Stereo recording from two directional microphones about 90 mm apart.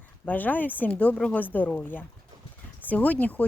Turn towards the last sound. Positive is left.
turn(degrees=15)  # may be behind; listen again after turning